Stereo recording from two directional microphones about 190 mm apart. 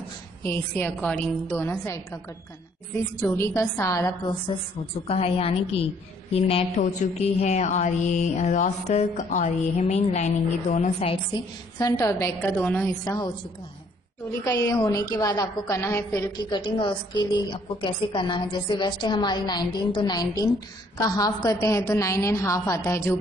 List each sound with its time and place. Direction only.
0.4 s a woman's voice: 10° left (ahead or behind)
3.3 s a woman's voice: 15° left (ahead or behind)
5.0 s mantra: 30° left (ahead or behind)
11.8 s a woman's voice: 15° left (ahead or behind)
13.0 s a woman's voice: 20° left (ahead or behind)
14.4 s a woman's voice: 20° left (ahead or behind)